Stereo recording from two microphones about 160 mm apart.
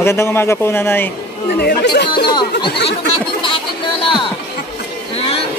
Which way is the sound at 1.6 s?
90° left.